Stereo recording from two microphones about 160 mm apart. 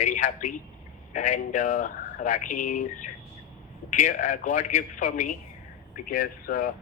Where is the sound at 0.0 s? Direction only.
55° left (ahead or behind).